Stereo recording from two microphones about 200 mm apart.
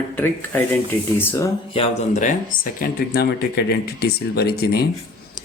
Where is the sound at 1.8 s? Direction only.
40° left (ahead or behind).